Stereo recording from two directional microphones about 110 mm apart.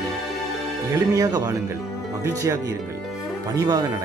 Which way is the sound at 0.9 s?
35° right (ahead or behind).